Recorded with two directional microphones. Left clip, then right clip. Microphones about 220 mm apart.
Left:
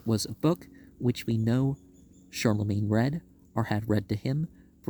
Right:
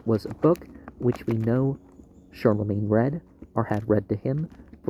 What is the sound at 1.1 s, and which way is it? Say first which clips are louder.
Speech: right 5 dB; 50° left (ahead or behind).